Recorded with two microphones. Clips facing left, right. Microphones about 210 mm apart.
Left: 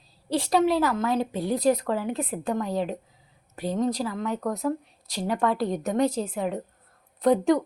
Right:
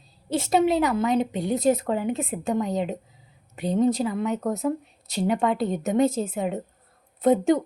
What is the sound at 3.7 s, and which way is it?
Speech, 5° right (ahead or behind).